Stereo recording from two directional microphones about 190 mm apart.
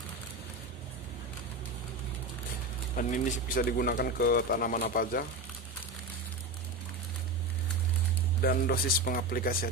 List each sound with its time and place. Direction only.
3.0 s speech: 45° left (ahead or behind)
8.4 s speech: 55° left (ahead or behind)